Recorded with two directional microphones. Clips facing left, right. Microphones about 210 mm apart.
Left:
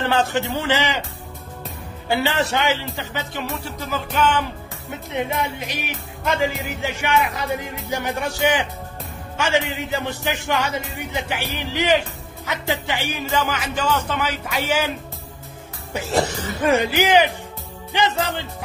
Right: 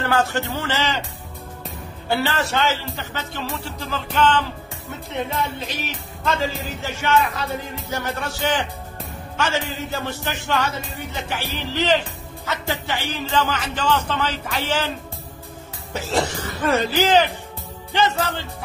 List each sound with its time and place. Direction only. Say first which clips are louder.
0.0 s speech: left 1 dB; 20° left (ahead or behind)
2.0 s speech: left 1 dB; 20° left (ahead or behind)
15.9 s speech: left 1 dB; 15° left (ahead or behind)